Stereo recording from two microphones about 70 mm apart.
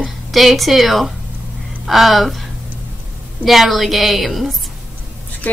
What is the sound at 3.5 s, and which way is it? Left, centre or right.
A woman's voice, centre.